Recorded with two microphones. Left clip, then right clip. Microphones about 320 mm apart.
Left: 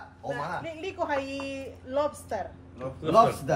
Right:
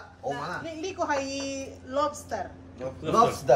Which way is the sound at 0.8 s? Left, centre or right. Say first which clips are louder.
Right 2 dB; left.